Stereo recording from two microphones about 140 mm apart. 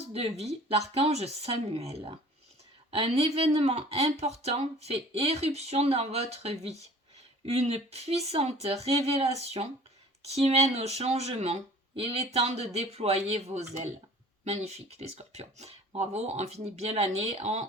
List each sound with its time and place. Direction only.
0.0 s speech: 50° right (ahead or behind)